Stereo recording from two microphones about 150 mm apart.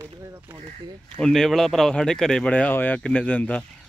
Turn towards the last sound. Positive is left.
turn(degrees=10)  # may be behind; listen again after turning